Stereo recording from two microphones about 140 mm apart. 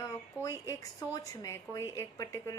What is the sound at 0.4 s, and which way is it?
A woman's voice, 20° left (ahead or behind).